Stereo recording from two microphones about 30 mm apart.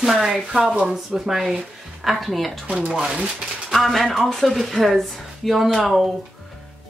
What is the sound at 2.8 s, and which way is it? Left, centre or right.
Speech, right.